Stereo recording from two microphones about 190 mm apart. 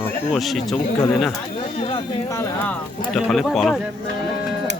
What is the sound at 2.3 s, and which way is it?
Speech, 10° left (ahead or behind).